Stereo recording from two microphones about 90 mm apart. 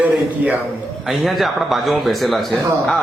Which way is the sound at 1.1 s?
Centre (ahead or behind).